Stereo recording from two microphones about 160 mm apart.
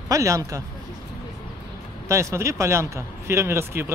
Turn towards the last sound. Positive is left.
turn(degrees=-15)  # may be behind; listen again after turning